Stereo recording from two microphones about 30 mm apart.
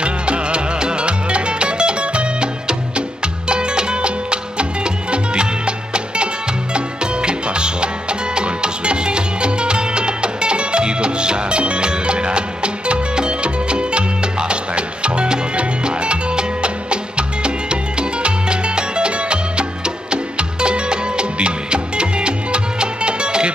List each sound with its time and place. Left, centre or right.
0.0 s music: right